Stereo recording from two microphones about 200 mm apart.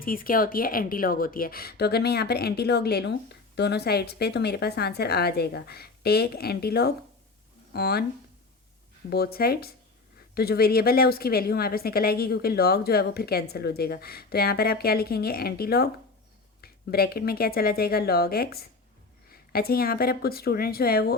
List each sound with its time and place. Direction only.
0.0 s a woman's voice: 45° left (ahead or behind)
9.0 s a woman's voice: 50° left (ahead or behind)